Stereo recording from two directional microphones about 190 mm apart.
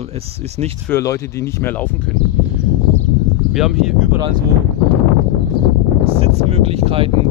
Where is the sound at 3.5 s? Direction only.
Centre (ahead or behind).